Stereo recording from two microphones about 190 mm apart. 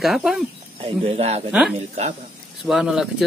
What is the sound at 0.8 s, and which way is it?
Speech, 30° right (ahead or behind).